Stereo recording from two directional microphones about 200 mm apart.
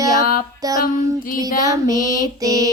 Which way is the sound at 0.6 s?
15° right (ahead or behind).